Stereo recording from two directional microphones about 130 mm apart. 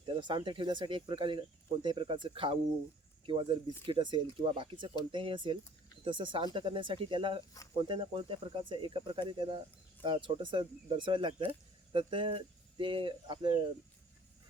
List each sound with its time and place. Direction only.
0.2 s speech: 40° right (ahead or behind)